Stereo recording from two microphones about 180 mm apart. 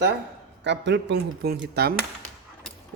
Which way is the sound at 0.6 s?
75° right (ahead or behind).